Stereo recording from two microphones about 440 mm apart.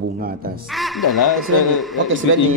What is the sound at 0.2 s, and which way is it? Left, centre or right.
Speech, centre.